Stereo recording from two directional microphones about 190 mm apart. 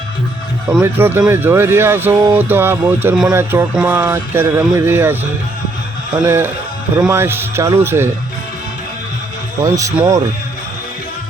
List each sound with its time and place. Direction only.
0.7 s speech: 10° right (ahead or behind)
6.2 s speech: 10° right (ahead or behind)
9.6 s speech: 15° right (ahead or behind)